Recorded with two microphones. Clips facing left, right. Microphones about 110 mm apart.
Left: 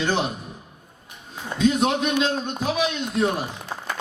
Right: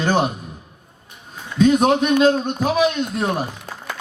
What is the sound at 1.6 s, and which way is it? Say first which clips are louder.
Speech: right 5 dB; 45° right (ahead or behind).